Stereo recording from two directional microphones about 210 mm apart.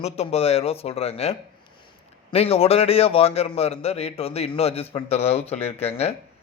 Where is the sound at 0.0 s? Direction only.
30° left (ahead or behind).